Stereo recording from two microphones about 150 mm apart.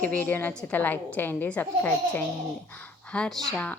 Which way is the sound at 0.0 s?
10° left (ahead or behind).